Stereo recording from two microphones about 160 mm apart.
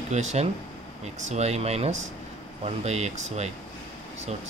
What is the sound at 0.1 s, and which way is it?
Speech, 45° right (ahead or behind).